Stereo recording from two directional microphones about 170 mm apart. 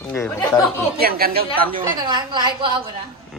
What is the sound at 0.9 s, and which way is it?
Speech, 65° right (ahead or behind).